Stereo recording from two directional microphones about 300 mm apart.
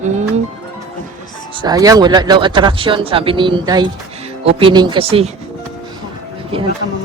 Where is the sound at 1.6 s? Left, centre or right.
Centre.